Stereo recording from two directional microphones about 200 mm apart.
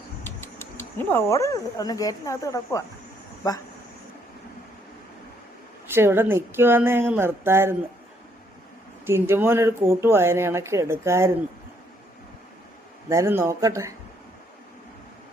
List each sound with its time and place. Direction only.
0.3 s speech: 10° left (ahead or behind)
5.9 s speech: 10° right (ahead or behind)
9.0 s speech: 10° right (ahead or behind)
13.1 s speech: 15° right (ahead or behind)